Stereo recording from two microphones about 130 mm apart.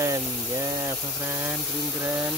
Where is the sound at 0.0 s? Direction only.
25° right (ahead or behind).